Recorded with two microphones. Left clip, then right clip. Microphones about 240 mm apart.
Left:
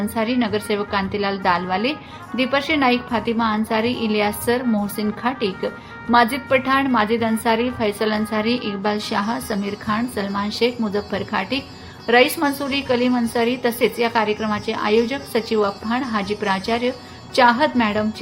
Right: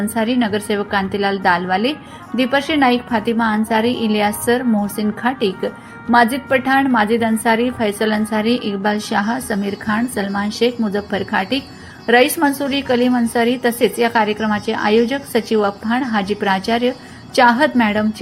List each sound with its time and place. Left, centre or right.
0.1 s a woman's voice: centre